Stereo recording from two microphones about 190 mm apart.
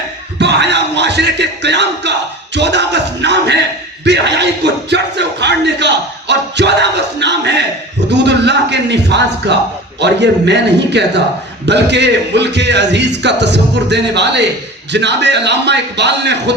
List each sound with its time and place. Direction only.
0.3 s speech: 65° right (ahead or behind)
2.6 s a sound: 65° right (ahead or behind)
4.0 s music: 65° right (ahead or behind)
8.2 s a man's voice: 65° right (ahead or behind)